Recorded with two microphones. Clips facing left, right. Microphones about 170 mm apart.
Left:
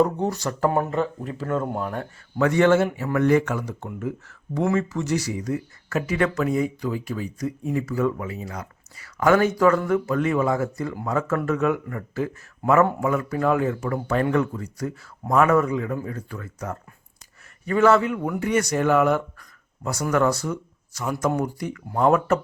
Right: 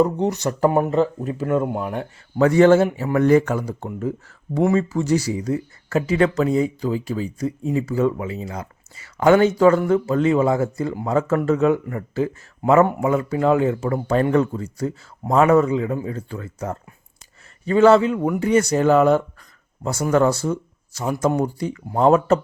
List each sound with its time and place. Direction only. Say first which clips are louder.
0.0 s speech: right 3 dB; 20° right (ahead or behind)
2.4 s speech: right 5 dB; 35° right (ahead or behind)